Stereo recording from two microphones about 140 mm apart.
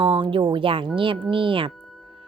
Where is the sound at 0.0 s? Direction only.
35° right (ahead or behind).